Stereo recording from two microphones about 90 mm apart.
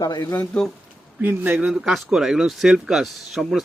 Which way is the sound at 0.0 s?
40° left (ahead or behind).